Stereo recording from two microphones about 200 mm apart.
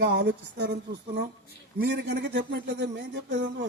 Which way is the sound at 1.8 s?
60° right (ahead or behind).